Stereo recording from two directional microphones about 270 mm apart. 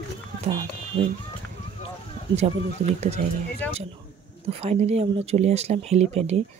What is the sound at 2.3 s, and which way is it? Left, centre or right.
Speech, right.